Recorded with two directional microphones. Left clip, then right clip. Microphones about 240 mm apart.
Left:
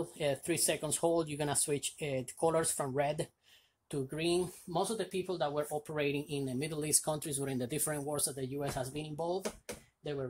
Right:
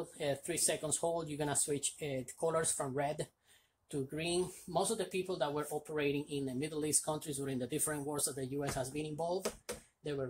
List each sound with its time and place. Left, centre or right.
0.2 s speech: left